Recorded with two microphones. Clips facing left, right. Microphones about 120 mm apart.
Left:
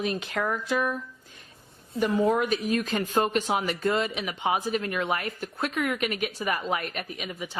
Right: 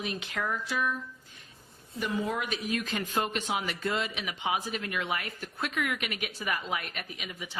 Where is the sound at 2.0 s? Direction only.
40° left (ahead or behind).